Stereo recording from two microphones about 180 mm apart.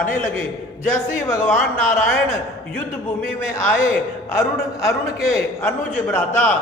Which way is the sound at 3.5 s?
15° left (ahead or behind).